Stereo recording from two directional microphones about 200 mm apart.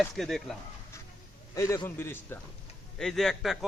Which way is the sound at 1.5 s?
15° left (ahead or behind).